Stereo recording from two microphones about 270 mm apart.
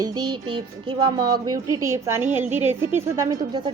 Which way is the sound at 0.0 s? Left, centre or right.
Centre.